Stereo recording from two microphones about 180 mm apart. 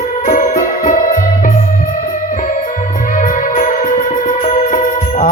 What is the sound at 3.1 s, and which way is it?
Music, 45° left (ahead or behind).